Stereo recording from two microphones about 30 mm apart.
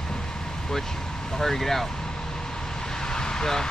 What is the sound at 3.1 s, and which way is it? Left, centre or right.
Vehicle, left.